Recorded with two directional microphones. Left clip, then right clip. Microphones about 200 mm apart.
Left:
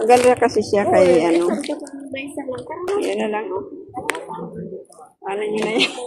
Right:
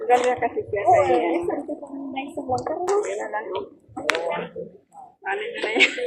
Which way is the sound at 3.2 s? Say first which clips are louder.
Left 5 dB; 35° left (ahead or behind).